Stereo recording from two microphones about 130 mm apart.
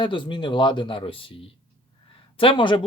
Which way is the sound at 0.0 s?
40° left (ahead or behind).